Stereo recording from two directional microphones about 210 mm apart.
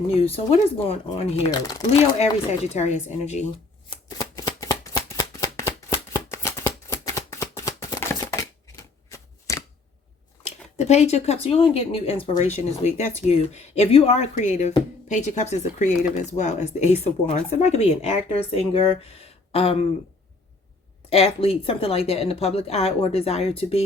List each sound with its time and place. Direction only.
0.3 s speech: 25° left (ahead or behind)
2.7 s speech: 35° left (ahead or behind)
3.8 s shuffling cards: 20° left (ahead or behind)
10.4 s speech: 30° left (ahead or behind)
21.1 s speech: 30° left (ahead or behind)